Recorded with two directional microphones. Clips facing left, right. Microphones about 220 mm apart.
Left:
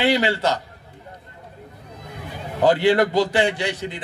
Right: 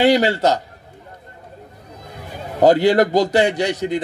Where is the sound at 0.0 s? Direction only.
40° right (ahead or behind).